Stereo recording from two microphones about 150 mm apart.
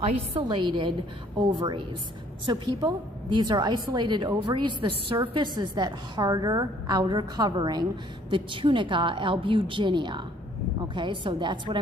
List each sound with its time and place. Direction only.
0.3 s a woman's voice: 35° right (ahead or behind)